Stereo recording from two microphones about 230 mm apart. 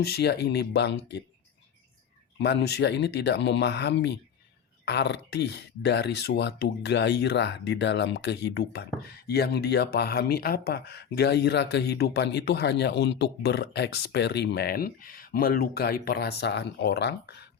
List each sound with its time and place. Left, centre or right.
0.0 s speech: left
2.4 s speech: left